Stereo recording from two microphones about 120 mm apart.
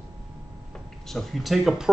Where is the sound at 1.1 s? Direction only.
Centre (ahead or behind).